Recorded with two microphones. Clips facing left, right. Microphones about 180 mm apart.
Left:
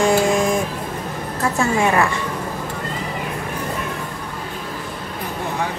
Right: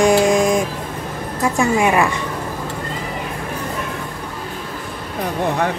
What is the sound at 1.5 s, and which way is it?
Speech, 15° right (ahead or behind).